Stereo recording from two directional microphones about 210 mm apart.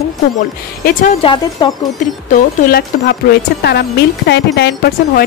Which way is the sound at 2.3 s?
50° left (ahead or behind).